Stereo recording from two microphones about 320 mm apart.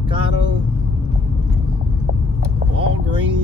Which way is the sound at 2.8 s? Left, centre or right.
Centre.